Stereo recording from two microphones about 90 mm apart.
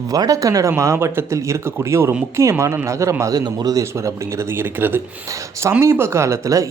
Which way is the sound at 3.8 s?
30° right (ahead or behind).